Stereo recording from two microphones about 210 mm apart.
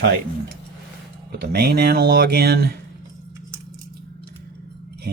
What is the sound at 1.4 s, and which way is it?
Speech, 45° right (ahead or behind).